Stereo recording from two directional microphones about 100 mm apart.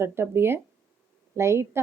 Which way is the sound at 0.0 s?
25° right (ahead or behind).